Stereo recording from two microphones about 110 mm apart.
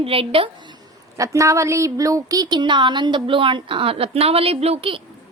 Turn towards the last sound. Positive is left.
turn(degrees=-60)  # may be behind; listen again after turning